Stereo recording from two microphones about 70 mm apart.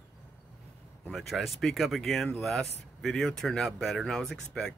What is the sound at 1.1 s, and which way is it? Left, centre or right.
Speech, centre.